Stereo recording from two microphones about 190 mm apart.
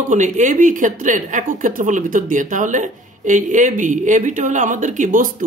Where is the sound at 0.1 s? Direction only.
40° right (ahead or behind).